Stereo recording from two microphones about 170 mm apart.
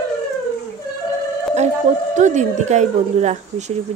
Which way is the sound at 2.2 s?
45° right (ahead or behind).